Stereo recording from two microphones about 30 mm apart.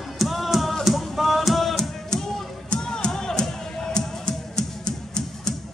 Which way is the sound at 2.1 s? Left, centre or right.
Left.